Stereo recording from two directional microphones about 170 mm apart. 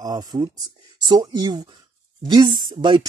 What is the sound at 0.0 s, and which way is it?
Speech, 20° right (ahead or behind).